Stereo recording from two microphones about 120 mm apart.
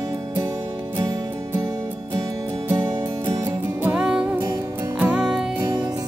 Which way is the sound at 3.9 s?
10° right (ahead or behind).